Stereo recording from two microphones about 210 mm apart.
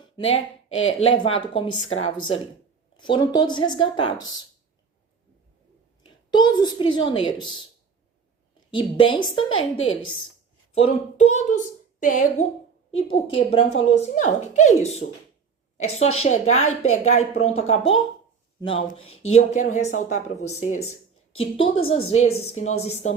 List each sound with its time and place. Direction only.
0.0 s a sound: 30° left (ahead or behind)
1.0 s a woman's voice: 25° left (ahead or behind)
3.0 s a woman's voice: 20° left (ahead or behind)
6.0 s a woman's voice: 20° left (ahead or behind)
8.7 s a woman's voice: 25° left (ahead or behind)
16.1 s a woman's voice: 30° left (ahead or behind)
16.6 s speech: 90° left
17.0 s a woman's voice: 30° left (ahead or behind)